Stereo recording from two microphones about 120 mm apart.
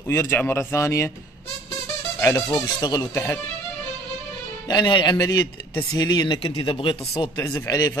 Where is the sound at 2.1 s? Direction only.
20° left (ahead or behind).